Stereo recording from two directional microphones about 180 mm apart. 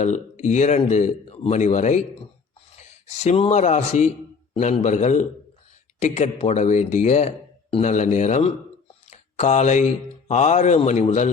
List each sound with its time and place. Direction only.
0.0 s speech: 40° left (ahead or behind)
9.0 s a sound: 40° left (ahead or behind)
10.2 s speech: 40° left (ahead or behind)